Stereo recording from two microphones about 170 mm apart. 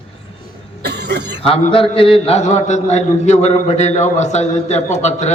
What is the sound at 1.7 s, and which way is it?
A man's voice, 35° left (ahead or behind).